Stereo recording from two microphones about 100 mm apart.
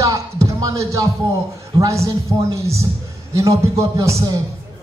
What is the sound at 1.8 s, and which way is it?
Music, 30° right (ahead or behind).